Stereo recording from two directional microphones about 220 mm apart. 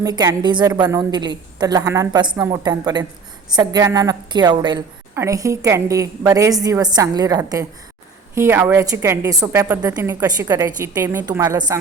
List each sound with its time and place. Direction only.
0.0 s a woman's voice: 15° right (ahead or behind)